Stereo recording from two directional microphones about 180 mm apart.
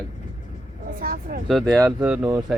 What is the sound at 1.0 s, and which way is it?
Vehicle, 55° right (ahead or behind).